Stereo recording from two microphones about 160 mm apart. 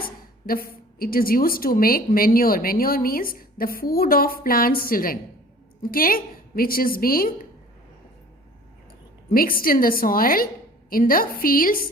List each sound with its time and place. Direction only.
0.4 s a woman's voice: 65° left (ahead or behind)
9.3 s a woman's voice: 65° left (ahead or behind)